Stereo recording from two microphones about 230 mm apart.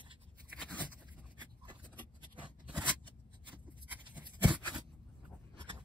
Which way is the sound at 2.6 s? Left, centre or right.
Centre.